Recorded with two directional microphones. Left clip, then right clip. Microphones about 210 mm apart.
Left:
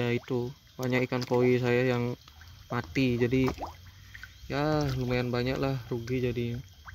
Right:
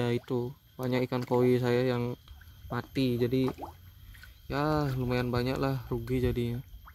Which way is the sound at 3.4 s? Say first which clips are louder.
Left 3 dB; 35° left (ahead or behind).